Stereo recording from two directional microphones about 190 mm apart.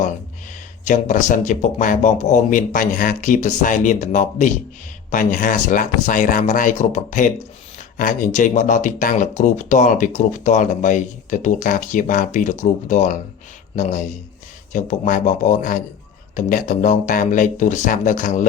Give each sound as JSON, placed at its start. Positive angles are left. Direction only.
{"t": 0.9, "sound": "speech", "side_deg": 40}